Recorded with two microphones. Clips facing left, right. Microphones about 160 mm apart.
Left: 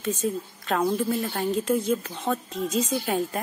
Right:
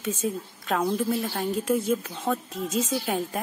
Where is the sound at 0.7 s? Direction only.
5° left (ahead or behind).